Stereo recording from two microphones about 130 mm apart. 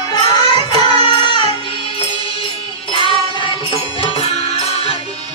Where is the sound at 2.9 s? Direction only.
45° left (ahead or behind).